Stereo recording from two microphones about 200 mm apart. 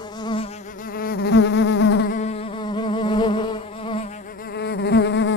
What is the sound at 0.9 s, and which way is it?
Insect, 50° left (ahead or behind).